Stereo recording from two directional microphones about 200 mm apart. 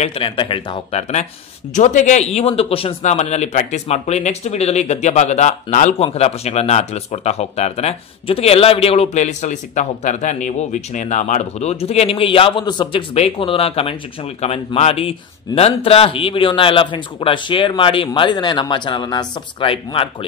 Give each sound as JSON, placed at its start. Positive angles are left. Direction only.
{"t": 0.0, "sound": "a man's voice", "side_deg": 25}